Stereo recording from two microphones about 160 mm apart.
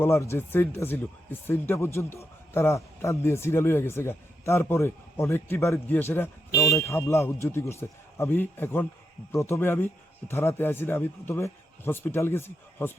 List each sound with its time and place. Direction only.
0.0 s speech: 15° left (ahead or behind)